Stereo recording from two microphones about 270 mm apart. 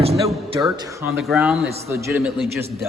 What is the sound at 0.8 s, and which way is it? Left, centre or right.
Speech, centre.